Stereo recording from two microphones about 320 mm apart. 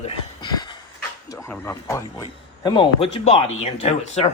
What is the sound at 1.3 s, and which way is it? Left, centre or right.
Speech, centre.